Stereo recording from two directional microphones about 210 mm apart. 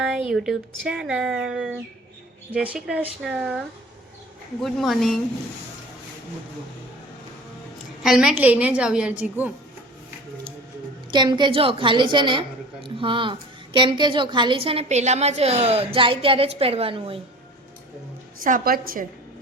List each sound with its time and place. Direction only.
0.3 s speech: centre (ahead or behind)
4.6 s speech: centre (ahead or behind)
8.0 s speech: 5° right (ahead or behind)
11.1 s a woman's voice: 20° right (ahead or behind)
18.4 s a woman's voice: 40° right (ahead or behind)